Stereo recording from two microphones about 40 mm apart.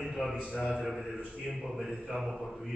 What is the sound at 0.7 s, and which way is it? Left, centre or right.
A man's voice, centre.